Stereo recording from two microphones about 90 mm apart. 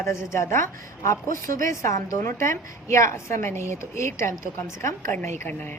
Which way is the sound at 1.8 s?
30° left (ahead or behind).